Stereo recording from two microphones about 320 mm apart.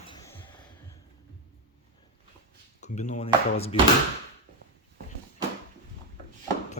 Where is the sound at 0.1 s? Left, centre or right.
Centre.